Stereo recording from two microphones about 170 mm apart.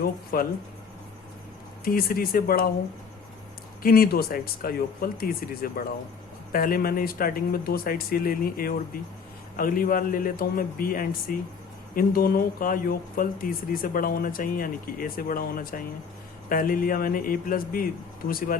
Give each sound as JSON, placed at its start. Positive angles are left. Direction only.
{"t": 0.0, "sound": "speech", "side_deg": 60}
{"t": 1.8, "sound": "speech", "side_deg": 60}
{"t": 3.8, "sound": "speech", "side_deg": 60}